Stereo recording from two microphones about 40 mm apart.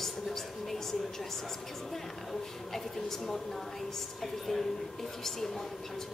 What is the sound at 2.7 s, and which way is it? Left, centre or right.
A woman's voice, centre.